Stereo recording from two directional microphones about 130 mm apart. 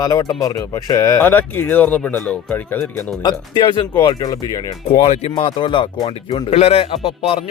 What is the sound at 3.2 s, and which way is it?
Speech, 35° left (ahead or behind).